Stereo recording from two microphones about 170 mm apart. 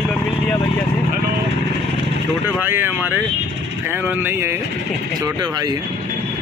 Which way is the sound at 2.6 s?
10° right (ahead or behind).